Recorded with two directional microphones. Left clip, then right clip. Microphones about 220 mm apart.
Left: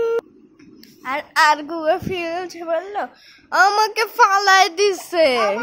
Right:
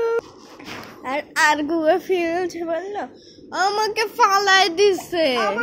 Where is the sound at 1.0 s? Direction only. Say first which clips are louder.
Left 3 dB; 10° left (ahead or behind).